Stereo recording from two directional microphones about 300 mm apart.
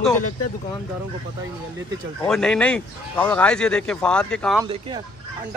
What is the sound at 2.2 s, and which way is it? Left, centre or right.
Speech, centre.